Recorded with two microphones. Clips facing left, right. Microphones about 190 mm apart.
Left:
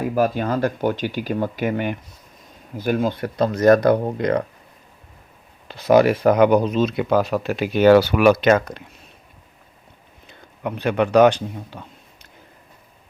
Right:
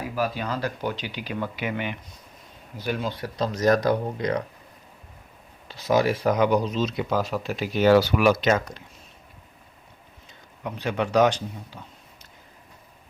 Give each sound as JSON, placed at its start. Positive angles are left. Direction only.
{"t": 0.0, "sound": "speech", "side_deg": 50}
{"t": 5.6, "sound": "speech", "side_deg": 55}
{"t": 10.2, "sound": "a man's voice", "side_deg": 60}